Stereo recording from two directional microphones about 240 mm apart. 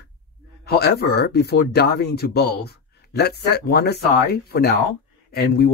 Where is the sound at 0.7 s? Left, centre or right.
Left.